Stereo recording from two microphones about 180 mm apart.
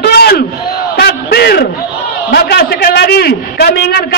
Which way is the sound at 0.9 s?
65° left (ahead or behind).